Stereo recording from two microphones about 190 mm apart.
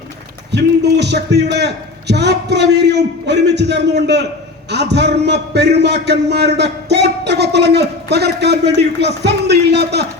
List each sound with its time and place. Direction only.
0.5 s a man's voice: 65° right (ahead or behind)